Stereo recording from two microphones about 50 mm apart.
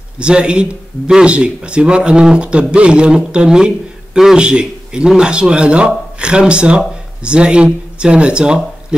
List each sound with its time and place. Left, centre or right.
0.2 s speech: centre